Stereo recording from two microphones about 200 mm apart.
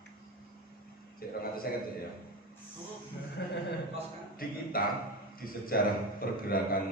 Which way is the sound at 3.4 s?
60° left (ahead or behind).